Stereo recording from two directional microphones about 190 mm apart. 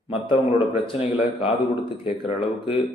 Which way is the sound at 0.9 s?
30° left (ahead or behind).